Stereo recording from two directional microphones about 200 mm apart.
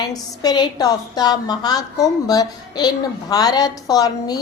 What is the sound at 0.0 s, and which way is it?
A woman's voice, 20° left (ahead or behind).